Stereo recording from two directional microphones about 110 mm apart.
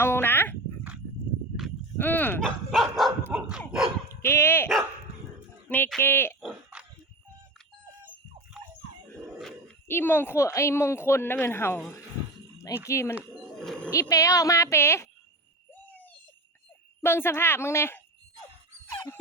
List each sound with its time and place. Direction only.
0.0 s dog: 20° left (ahead or behind)
2.0 s dog: 15° left (ahead or behind)
2.4 s dog: centre (ahead or behind)
3.3 s a sound: 10° right (ahead or behind)
4.1 s dog: 25° left (ahead or behind)
5.6 s a sound: 15° left (ahead or behind)
6.0 s speech: 20° left (ahead or behind)
6.7 s a sound: 10° right (ahead or behind)
9.9 s speech: 20° left (ahead or behind)
13.6 s roaring cats: 5° left (ahead or behind)
14.0 s speech: 30° left (ahead or behind)
17.0 s speech: 20° left (ahead or behind)
18.9 s dog: 30° left (ahead or behind)